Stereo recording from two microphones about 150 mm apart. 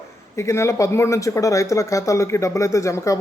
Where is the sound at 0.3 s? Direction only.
20° left (ahead or behind).